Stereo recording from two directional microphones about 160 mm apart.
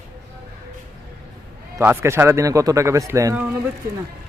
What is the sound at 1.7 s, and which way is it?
A man's voice, 15° right (ahead or behind).